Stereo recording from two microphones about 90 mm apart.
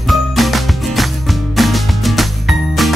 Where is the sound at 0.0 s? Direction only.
Centre (ahead or behind).